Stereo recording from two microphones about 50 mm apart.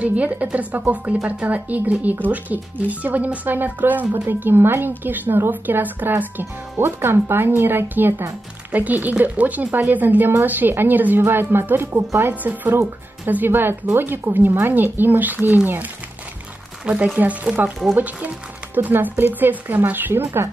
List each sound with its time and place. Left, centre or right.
0.0 s a woman's voice: right
6.8 s speech: right
8.7 s a woman's voice: right
16.8 s a woman's voice: right